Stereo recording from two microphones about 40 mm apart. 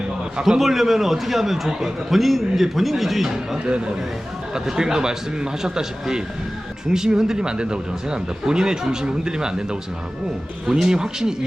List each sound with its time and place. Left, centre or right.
0.6 s a man's voice: centre
3.7 s a man's voice: right
10.7 s speech: centre